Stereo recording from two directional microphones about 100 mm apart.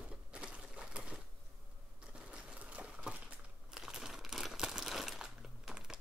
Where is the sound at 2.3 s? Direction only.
10° right (ahead or behind).